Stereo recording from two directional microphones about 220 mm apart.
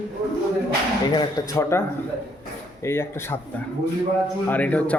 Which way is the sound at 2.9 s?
10° left (ahead or behind).